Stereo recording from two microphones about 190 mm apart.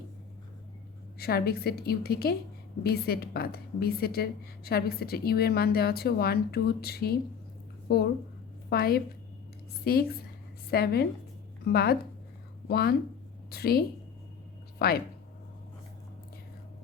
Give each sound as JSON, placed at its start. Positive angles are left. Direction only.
{"t": 1.2, "sound": "a woman's voice", "side_deg": 55}